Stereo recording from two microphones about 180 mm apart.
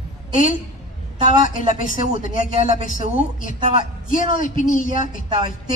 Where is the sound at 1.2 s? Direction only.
45° left (ahead or behind).